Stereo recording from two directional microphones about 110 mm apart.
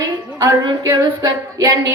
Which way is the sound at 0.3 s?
30° right (ahead or behind).